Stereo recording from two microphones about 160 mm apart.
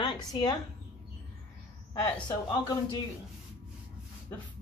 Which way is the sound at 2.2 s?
25° left (ahead or behind).